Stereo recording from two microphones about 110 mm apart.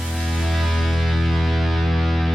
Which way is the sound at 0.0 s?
Centre (ahead or behind).